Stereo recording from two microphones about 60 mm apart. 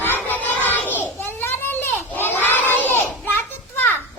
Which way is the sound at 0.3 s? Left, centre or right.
Left.